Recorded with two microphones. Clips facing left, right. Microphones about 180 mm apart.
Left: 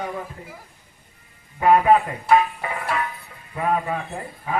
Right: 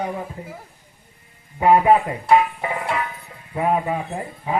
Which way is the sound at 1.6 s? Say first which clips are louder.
Right 1 dB; 20° right (ahead or behind).